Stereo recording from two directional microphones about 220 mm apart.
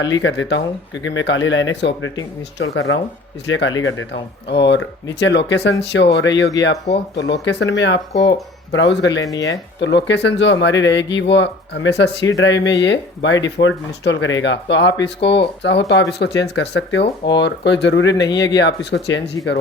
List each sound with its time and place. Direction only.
0.0 s speech: 55° left (ahead or behind)
9.2 s speech: 15° left (ahead or behind)
9.5 s speech: 55° left (ahead or behind)